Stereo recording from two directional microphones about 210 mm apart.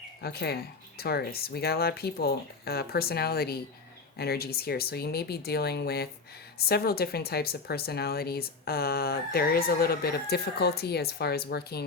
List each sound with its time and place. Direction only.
0.2 s speech: 50° left (ahead or behind)